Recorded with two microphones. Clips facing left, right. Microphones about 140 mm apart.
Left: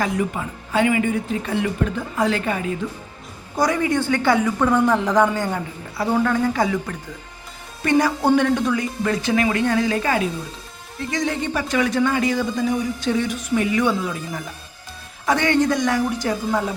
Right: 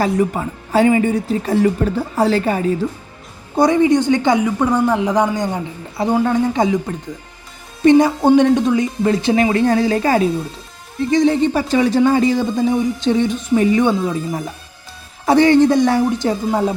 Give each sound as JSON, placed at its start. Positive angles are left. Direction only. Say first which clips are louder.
{"t": 0.0, "sound": "a woman's voice", "louder": "right 6 dB", "side_deg": -35}